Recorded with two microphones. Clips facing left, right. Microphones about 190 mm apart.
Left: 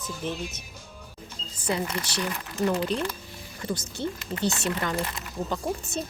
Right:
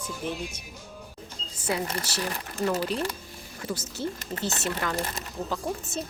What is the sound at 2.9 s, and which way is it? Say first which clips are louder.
Speech: left 1 dB; 35° left (ahead or behind).